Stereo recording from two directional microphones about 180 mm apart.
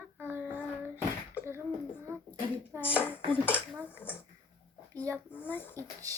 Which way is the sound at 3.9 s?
10° left (ahead or behind).